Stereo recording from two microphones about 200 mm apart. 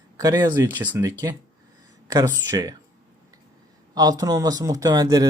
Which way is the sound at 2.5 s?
20° right (ahead or behind).